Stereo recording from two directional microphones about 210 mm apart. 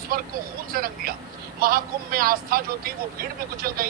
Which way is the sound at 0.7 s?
45° right (ahead or behind).